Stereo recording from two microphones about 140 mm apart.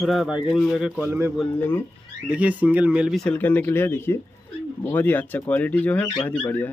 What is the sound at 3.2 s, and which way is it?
Speech, 10° left (ahead or behind).